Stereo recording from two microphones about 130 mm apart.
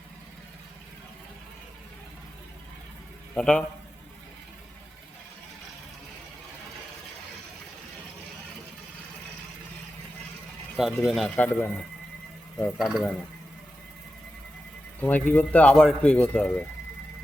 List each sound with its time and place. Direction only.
3.3 s a man's voice: 5° left (ahead or behind)
10.8 s speech: centre (ahead or behind)
11.3 s a man's voice: 10° left (ahead or behind)
15.0 s a man's voice: 15° left (ahead or behind)